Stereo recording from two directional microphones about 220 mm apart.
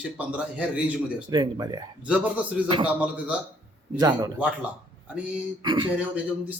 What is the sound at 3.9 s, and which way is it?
Speech, 15° right (ahead or behind).